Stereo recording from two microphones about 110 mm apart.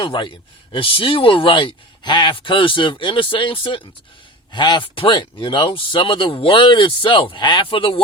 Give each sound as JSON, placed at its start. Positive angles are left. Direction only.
{"t": 0.0, "sound": "speech", "side_deg": 50}